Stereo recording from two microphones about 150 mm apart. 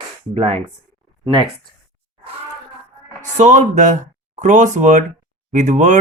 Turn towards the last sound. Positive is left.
turn(degrees=-55)  # may be behind; listen again after turning